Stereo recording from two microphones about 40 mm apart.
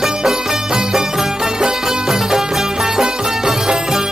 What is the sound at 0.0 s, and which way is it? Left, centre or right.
Music, centre.